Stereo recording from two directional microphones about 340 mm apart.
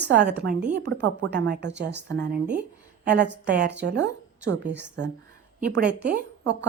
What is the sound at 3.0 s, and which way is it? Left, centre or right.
Speech, right.